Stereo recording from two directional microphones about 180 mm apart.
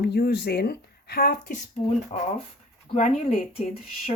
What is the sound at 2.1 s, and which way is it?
Speech, 40° left (ahead or behind).